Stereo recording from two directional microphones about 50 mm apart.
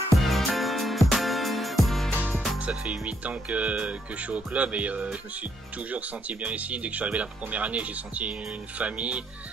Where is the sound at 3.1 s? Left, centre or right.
Right.